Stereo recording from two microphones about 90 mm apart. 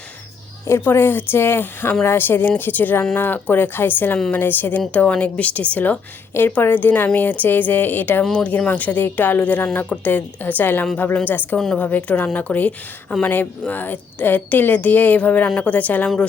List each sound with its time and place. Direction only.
0.7 s a woman's voice: 25° left (ahead or behind)
8.2 s speech: 5° left (ahead or behind)
8.4 s a woman's voice: 15° left (ahead or behind)